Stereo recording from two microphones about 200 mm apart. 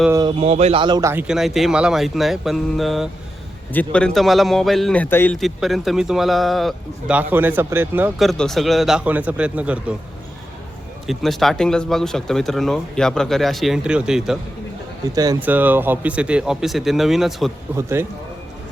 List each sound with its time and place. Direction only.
0.1 s a man's voice: 20° right (ahead or behind)
0.3 s a man's voice: 30° right (ahead or behind)
1.3 s a man's voice: centre (ahead or behind)
8.3 s a man's voice: centre (ahead or behind)
11.0 s a man's voice: centre (ahead or behind)
15.1 s a man's voice: 20° right (ahead or behind); by 17.5 s centre (ahead or behind)
17.7 s speech: 10° right (ahead or behind)